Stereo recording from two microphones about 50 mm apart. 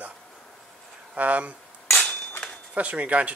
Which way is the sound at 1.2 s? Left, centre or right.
Right.